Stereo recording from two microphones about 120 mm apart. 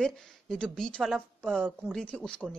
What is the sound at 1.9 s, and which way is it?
Speech, 10° left (ahead or behind).